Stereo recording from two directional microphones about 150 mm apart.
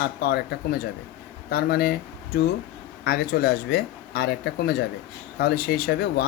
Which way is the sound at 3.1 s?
90° left.